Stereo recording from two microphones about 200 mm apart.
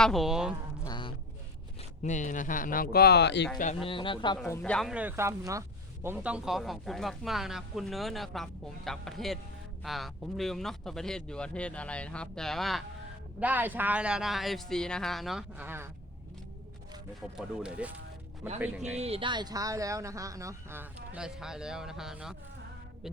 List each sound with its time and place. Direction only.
0.0 s speech: centre (ahead or behind)
0.8 s a sound: 20° left (ahead or behind)
2.0 s speech: 35° left (ahead or behind); by 3.5 s 60° left (ahead or behind)
3.8 s speech: 25° left (ahead or behind)
4.4 s speech: 10° left (ahead or behind); by 15.9 s 10° right (ahead or behind)
17.3 s speech: 5° right (ahead or behind)
18.9 s speech: 30° right (ahead or behind); by 22.4 s centre (ahead or behind)